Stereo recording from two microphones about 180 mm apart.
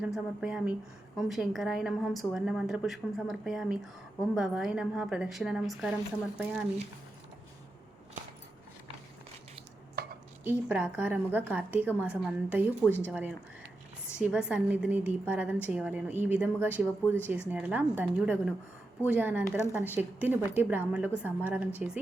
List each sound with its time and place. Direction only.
0.0 s a woman's voice: 5° right (ahead or behind)
10.0 s dishes: 60° right (ahead or behind)
10.7 s a woman's voice: 5° right (ahead or behind)